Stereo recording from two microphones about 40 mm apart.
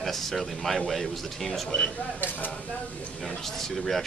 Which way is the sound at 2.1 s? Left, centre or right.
Left.